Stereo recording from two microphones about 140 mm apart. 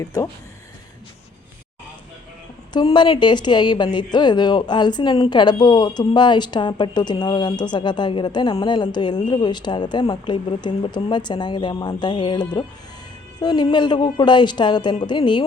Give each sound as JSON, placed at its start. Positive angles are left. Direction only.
{"t": 0.0, "sound": "speech", "side_deg": 25}
{"t": 2.7, "sound": "a woman's voice", "side_deg": 35}